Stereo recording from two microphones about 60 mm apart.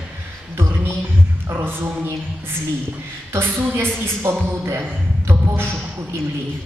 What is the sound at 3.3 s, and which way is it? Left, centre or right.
A man's voice, right.